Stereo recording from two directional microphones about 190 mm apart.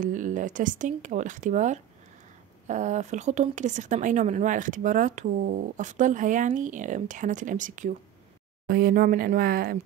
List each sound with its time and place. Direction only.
0.0 s a woman's voice: 45° right (ahead or behind)